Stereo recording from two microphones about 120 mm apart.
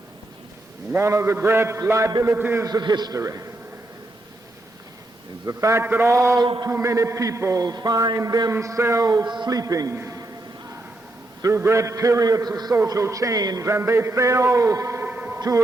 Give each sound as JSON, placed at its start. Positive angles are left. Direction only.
{"t": 0.9, "sound": "a man's voice", "side_deg": -25}
{"t": 2.6, "sound": "a man's voice", "side_deg": -35}
{"t": 5.5, "sound": "a man's voice", "side_deg": -25}
{"t": 6.4, "sound": "a man's voice", "side_deg": -35}
{"t": 6.7, "sound": "a man's voice", "side_deg": -25}
{"t": 9.2, "sound": "a man's voice", "side_deg": -40}
{"t": 11.4, "sound": "a man's voice", "side_deg": -25}
{"t": 15.4, "sound": "speech", "side_deg": -30}